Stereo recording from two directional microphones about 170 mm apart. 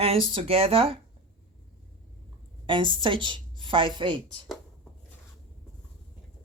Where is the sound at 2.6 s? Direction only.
30° right (ahead or behind).